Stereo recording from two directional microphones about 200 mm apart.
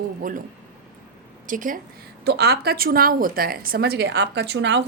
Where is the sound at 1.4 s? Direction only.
40° right (ahead or behind).